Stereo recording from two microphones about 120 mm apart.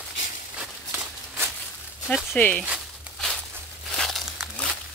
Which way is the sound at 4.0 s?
Centre (ahead or behind).